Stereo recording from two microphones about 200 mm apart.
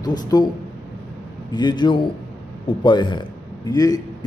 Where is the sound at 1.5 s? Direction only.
20° left (ahead or behind).